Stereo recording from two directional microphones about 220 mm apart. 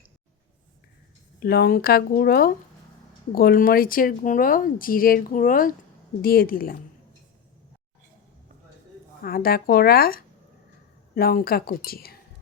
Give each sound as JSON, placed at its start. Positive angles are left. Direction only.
{"t": 1.4, "sound": "speech", "side_deg": 45}
{"t": 9.2, "sound": "speech", "side_deg": 40}